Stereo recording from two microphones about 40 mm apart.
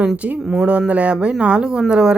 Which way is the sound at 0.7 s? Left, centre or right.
Right.